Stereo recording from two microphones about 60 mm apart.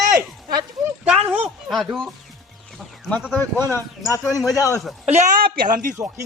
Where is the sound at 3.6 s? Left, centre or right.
Left.